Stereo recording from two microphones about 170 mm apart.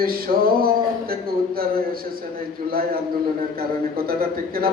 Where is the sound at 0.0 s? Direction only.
60° right (ahead or behind).